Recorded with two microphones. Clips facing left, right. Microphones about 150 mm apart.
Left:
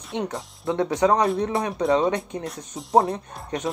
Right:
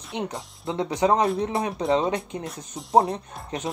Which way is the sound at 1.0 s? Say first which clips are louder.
Even; 20° right (ahead or behind).